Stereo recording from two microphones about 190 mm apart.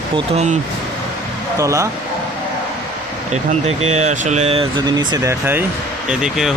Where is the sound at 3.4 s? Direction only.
35° right (ahead or behind).